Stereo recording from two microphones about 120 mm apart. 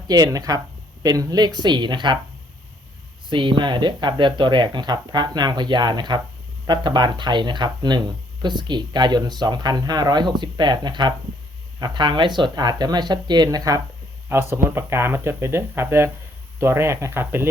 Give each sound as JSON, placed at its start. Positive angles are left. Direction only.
{"t": 0.1, "sound": "speech", "side_deg": -30}
{"t": 3.2, "sound": "speech", "side_deg": -45}
{"t": 14.3, "sound": "speech", "side_deg": -20}